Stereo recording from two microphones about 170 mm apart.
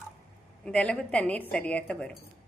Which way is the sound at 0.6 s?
5° left (ahead or behind).